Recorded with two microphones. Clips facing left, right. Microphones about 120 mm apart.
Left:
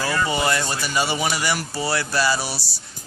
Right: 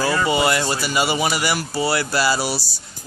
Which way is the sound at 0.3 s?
10° right (ahead or behind).